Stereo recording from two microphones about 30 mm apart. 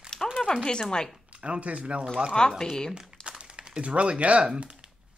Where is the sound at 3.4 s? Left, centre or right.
Right.